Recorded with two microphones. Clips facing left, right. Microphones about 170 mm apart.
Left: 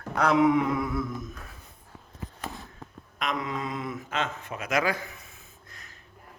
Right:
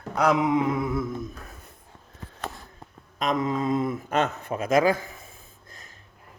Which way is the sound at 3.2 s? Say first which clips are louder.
Right 6 dB; 45° right (ahead or behind).